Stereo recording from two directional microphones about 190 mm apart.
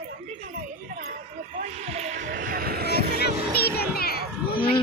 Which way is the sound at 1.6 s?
35° right (ahead or behind).